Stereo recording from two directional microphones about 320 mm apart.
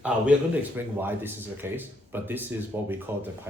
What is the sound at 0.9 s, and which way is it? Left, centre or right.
Speech, centre.